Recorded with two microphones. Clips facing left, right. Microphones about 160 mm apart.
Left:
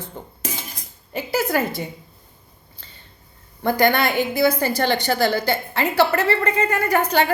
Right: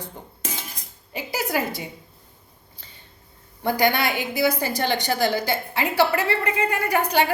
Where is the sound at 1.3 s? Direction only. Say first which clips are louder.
Left 4 dB; 50° left (ahead or behind).